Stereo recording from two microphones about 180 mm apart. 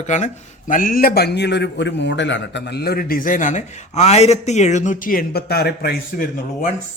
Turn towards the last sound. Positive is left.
turn(degrees=55)  # may be behind; listen again after turning